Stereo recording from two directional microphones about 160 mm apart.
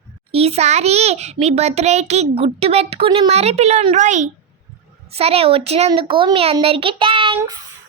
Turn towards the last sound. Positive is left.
turn(degrees=-30)  # may be behind; listen again after turning